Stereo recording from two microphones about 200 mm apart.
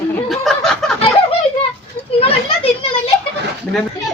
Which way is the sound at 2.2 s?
30° left (ahead or behind).